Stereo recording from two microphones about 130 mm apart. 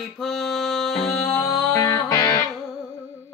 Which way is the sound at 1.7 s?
25° left (ahead or behind).